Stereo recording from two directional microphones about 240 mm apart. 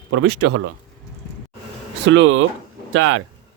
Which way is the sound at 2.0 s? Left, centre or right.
Right.